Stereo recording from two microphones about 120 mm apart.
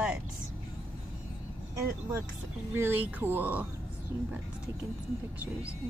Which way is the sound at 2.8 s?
15° right (ahead or behind).